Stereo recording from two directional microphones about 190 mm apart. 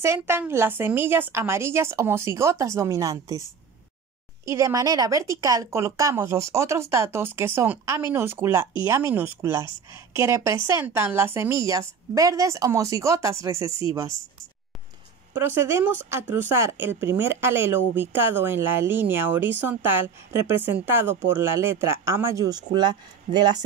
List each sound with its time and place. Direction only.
0.0 s speech: 15° right (ahead or behind)
4.5 s speech: 15° right (ahead or behind)
15.3 s speech: 15° right (ahead or behind)